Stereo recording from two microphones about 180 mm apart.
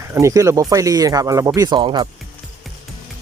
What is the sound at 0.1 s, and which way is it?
Speech, 15° right (ahead or behind).